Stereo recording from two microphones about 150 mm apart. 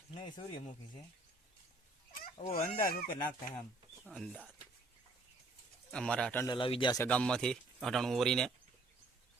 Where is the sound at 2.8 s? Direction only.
70° left (ahead or behind).